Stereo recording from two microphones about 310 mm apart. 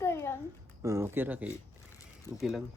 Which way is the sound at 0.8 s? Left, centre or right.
Centre.